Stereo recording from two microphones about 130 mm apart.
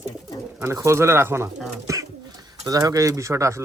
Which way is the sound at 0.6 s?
20° right (ahead or behind).